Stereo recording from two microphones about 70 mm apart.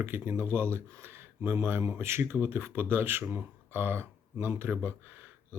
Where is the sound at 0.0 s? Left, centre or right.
Right.